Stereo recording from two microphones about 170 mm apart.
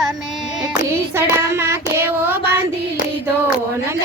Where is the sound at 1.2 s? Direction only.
15° right (ahead or behind).